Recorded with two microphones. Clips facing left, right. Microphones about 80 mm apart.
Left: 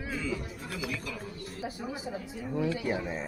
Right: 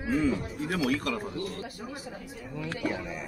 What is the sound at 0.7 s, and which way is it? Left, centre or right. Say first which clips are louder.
Speech: right 9 dB; right.